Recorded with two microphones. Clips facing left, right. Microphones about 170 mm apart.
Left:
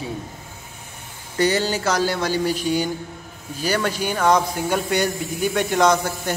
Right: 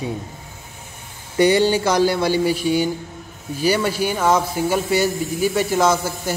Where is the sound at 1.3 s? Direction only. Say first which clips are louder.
Right 5 dB; 15° right (ahead or behind).